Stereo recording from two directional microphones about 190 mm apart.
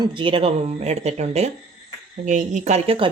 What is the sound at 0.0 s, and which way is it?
Speech, 25° right (ahead or behind).